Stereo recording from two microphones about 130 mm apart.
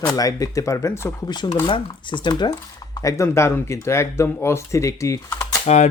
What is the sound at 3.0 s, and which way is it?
Speech, 20° left (ahead or behind).